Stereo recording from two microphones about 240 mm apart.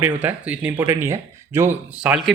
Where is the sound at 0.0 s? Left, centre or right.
Centre.